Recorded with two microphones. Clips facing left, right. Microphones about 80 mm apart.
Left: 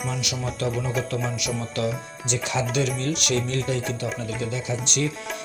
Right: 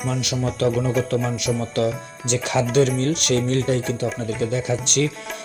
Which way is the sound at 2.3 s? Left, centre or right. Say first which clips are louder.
Right 6 dB; right.